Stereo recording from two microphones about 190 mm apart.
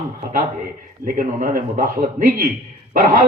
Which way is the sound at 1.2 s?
45° right (ahead or behind).